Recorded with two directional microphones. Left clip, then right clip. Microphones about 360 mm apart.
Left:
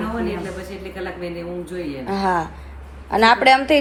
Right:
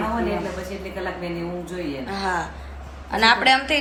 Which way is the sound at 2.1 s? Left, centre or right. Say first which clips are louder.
Left 6 dB; centre.